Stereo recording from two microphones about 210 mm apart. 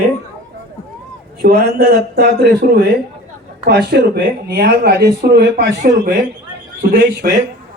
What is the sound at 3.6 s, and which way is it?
Speech, 50° right (ahead or behind).